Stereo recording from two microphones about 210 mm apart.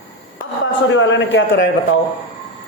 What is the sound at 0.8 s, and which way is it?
A man's voice, 60° left (ahead or behind).